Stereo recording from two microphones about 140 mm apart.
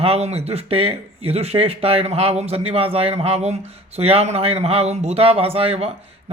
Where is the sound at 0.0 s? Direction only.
45° right (ahead or behind).